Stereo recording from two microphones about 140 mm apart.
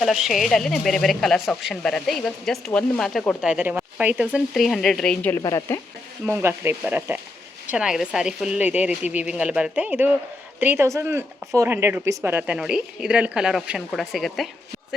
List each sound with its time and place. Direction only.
0.0 s a woman's voice: centre (ahead or behind)
5.3 s speech: 25° left (ahead or behind)
6.2 s a woman's voice: 15° right (ahead or behind); by 14.5 s centre (ahead or behind)